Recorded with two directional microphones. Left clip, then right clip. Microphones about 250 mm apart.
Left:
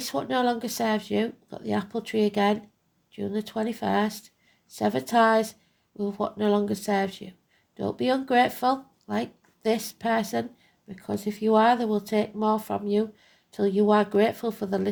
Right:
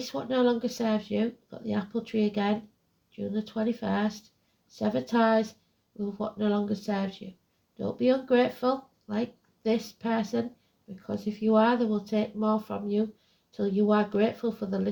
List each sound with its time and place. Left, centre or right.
0.0 s speech: left